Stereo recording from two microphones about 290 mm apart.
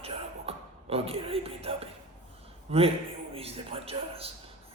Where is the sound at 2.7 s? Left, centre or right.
Centre.